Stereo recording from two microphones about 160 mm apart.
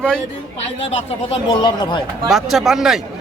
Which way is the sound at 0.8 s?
35° left (ahead or behind).